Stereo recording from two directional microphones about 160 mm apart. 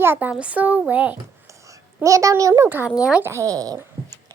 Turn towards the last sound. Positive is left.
turn(degrees=-20)  # may be behind; listen again after turning